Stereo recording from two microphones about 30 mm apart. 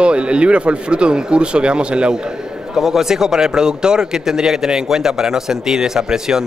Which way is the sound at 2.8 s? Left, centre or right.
Centre.